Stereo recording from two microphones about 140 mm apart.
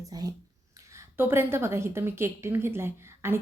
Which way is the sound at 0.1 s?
25° right (ahead or behind).